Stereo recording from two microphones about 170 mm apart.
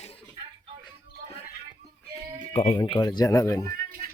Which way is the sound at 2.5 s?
35° left (ahead or behind).